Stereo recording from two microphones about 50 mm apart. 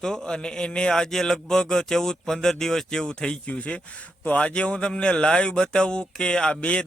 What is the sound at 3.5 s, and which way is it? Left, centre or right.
A man's voice, left.